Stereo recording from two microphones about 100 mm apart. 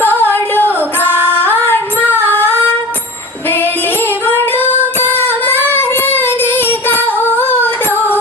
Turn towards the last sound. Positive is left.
turn(degrees=20)  # may be behind; listen again after turning